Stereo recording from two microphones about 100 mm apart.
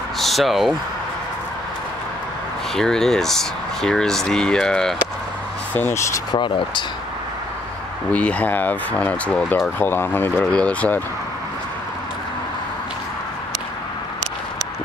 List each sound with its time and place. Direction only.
0.2 s speech: centre (ahead or behind)
2.7 s speech: 5° left (ahead or behind)
5.8 s speech: 25° left (ahead or behind)
6.3 s speech: 50° left (ahead or behind)
8.1 s speech: 15° left (ahead or behind)